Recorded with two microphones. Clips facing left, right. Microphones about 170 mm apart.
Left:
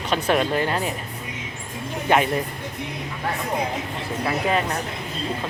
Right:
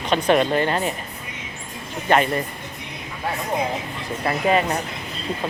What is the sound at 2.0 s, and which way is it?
Speech, 10° left (ahead or behind).